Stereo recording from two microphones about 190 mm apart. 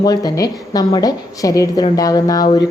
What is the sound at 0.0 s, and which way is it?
A woman's voice, 20° left (ahead or behind).